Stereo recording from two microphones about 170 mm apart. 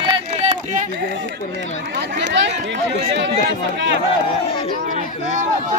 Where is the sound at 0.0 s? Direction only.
40° right (ahead or behind).